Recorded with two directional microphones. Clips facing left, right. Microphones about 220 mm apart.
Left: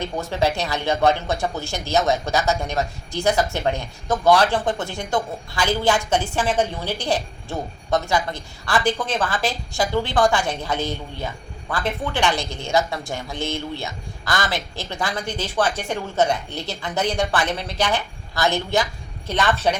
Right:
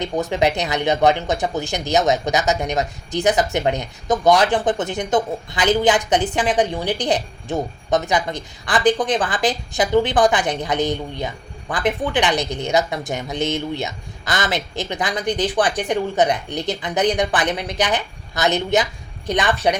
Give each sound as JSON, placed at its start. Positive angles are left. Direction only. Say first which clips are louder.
{"t": 0.0, "sound": "speech", "louder": "right 3 dB", "side_deg": -15}